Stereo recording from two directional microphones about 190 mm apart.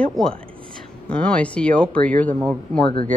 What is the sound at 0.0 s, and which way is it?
Speech, 5° left (ahead or behind).